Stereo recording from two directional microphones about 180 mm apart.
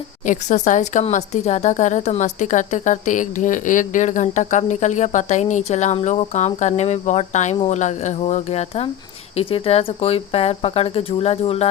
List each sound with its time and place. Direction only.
0.3 s speech: 40° left (ahead or behind)